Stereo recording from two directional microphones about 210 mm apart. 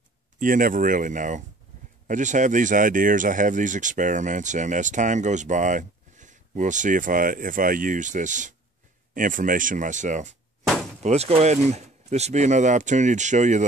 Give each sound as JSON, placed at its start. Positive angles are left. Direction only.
{"t": 0.4, "sound": "speech", "side_deg": -40}